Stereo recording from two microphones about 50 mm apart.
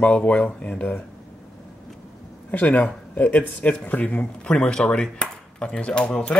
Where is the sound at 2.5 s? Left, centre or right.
Left.